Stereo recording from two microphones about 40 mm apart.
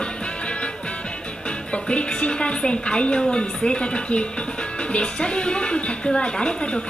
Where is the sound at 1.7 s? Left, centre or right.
Left.